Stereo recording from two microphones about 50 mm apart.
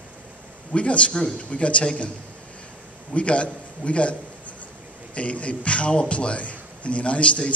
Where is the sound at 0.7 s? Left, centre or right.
Left.